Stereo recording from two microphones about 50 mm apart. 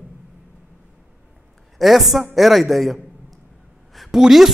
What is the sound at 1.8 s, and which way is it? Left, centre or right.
Speech, centre.